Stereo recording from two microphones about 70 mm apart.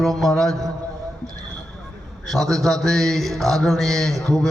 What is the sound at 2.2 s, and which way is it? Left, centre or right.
Mantra, centre.